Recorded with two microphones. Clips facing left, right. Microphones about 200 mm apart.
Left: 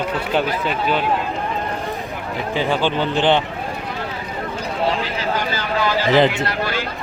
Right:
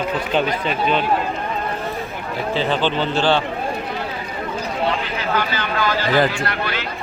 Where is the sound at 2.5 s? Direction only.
10° left (ahead or behind).